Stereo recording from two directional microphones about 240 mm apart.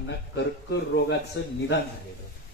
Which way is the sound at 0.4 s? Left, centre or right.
Left.